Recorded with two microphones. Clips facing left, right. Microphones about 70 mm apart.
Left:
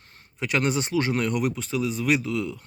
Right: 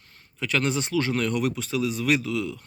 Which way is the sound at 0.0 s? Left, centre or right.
Left.